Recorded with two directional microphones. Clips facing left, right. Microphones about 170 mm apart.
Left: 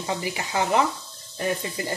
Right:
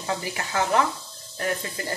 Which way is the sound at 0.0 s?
15° left (ahead or behind).